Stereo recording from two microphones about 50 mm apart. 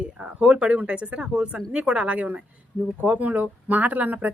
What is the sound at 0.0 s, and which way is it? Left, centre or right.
Speech, right.